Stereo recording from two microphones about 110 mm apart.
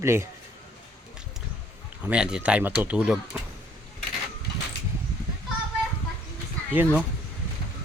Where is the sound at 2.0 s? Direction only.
10° right (ahead or behind).